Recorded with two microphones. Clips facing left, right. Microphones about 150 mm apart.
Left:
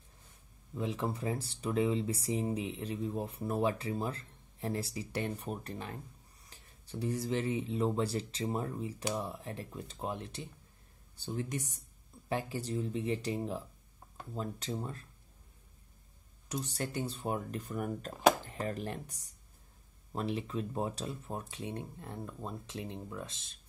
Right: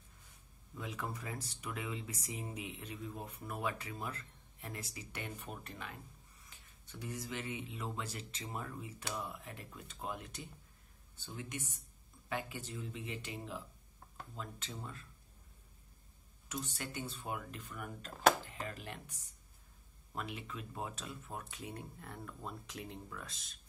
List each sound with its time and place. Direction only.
0.7 s speech: 30° left (ahead or behind)
16.4 s speech: 35° left (ahead or behind)